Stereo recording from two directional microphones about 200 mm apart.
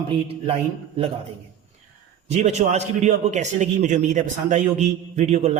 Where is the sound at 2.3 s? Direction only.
35° right (ahead or behind).